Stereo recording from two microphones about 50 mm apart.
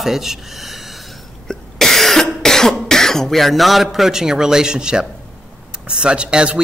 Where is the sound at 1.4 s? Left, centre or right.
Centre.